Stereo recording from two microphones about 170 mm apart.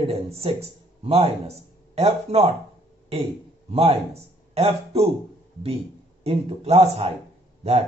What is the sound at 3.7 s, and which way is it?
Speech, 35° right (ahead or behind).